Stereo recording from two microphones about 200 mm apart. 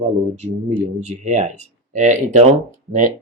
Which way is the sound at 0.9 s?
35° right (ahead or behind).